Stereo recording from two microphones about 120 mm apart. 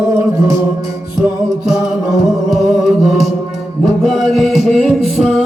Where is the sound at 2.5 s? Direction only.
Centre (ahead or behind).